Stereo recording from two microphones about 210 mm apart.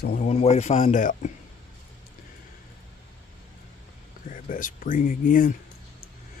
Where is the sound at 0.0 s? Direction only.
40° left (ahead or behind).